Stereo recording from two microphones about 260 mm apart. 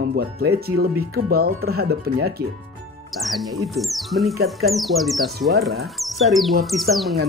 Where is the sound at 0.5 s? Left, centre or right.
Right.